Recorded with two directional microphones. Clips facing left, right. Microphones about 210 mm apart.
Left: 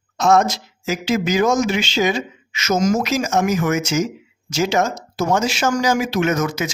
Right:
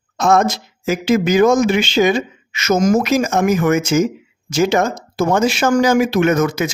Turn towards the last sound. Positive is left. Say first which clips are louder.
# right 4 dB
turn(degrees=-55)  # may be behind; listen again after turning